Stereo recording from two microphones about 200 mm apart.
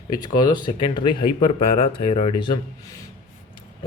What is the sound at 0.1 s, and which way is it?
Speech, 20° left (ahead or behind).